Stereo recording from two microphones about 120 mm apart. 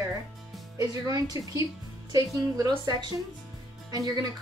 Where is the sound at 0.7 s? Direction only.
30° right (ahead or behind).